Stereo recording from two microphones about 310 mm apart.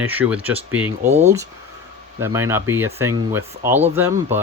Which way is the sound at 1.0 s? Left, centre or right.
Right.